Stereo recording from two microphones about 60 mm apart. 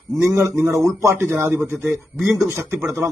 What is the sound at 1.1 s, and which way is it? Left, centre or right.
A man's voice, right.